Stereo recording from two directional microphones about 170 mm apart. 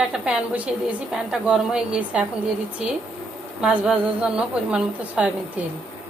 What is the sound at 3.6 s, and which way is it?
A woman's voice, 5° right (ahead or behind).